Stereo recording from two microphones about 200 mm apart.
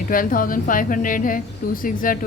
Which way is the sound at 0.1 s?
45° left (ahead or behind).